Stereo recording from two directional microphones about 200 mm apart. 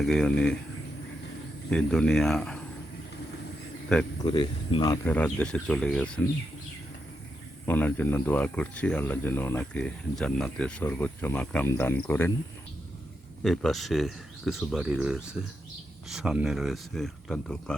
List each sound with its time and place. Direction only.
0.0 s speech: centre (ahead or behind)
1.7 s speech: 5° left (ahead or behind)
4.2 s speech: 25° left (ahead or behind)
5.0 s speech: 10° left (ahead or behind)
7.6 s speech: 10° left (ahead or behind)
13.4 s speech: centre (ahead or behind)